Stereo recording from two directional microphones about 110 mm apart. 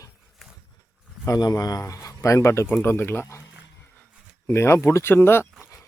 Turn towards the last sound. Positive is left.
turn(degrees=20)  # may be behind; listen again after turning